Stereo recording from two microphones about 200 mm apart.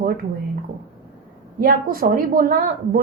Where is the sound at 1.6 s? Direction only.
45° right (ahead or behind).